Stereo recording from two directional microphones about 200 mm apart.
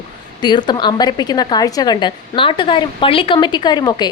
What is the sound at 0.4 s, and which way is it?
A woman's voice, 20° left (ahead or behind).